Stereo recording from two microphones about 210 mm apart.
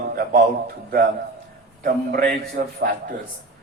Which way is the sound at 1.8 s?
45° right (ahead or behind).